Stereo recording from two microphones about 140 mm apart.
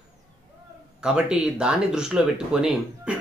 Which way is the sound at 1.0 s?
5° right (ahead or behind).